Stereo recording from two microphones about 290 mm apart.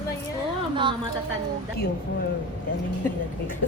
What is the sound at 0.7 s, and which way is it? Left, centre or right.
Speech, centre.